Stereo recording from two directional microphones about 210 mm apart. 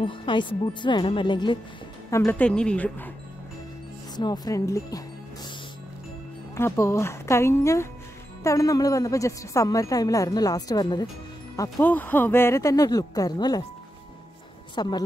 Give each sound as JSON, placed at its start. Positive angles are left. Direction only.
{"t": 0.0, "sound": "a woman's voice", "side_deg": 25}
{"t": 2.0, "sound": "a woman's voice", "side_deg": 10}
{"t": 4.2, "sound": "speech", "side_deg": 15}
{"t": 6.5, "sound": "a woman's voice", "side_deg": 15}
{"t": 14.8, "sound": "a woman's voice", "side_deg": 20}